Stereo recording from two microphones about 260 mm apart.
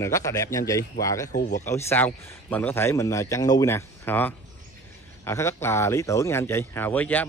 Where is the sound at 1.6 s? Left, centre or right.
Centre.